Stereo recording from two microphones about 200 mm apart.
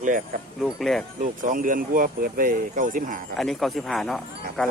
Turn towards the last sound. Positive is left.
turn(degrees=0)  # may be behind; listen again after turning